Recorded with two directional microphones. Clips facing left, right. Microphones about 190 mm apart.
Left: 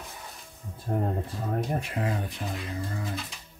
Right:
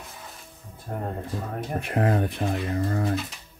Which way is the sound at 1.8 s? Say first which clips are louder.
Right 7 dB; 55° right (ahead or behind).